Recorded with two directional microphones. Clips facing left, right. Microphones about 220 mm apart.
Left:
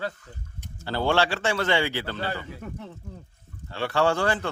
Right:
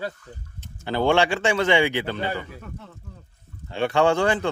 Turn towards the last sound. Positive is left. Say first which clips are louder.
# right 4 dB
turn(degrees=-20)  # may be behind; listen again after turning